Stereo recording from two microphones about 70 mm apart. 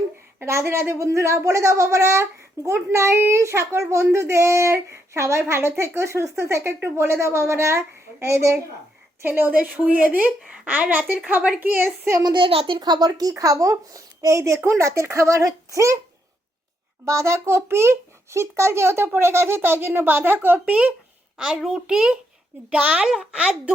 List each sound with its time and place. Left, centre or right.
0.3 s a child's voice: right
9.2 s a woman's voice: right
12.8 s speech: right
13.3 s speech: right
17.1 s a child's voice: right
21.3 s a child's voice: centre